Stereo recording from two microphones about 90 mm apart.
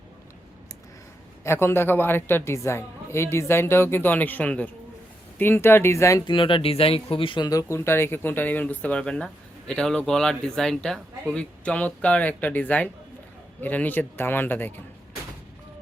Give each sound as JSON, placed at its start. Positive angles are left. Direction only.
{"t": 1.5, "sound": "a woman's voice", "side_deg": 25}
{"t": 6.2, "sound": "speech", "side_deg": 70}
{"t": 7.5, "sound": "a woman's voice", "side_deg": 30}